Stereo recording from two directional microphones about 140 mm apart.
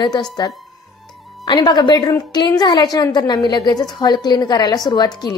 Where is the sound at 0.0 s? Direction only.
30° left (ahead or behind).